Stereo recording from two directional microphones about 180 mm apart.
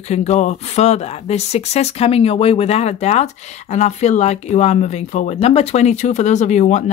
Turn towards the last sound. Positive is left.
turn(degrees=40)  # may be behind; listen again after turning